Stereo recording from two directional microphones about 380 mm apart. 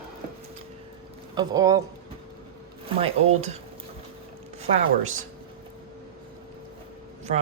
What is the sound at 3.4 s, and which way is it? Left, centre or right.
Speech, centre.